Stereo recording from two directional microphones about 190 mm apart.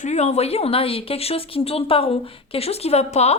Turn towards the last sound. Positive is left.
turn(degrees=35)  # may be behind; listen again after turning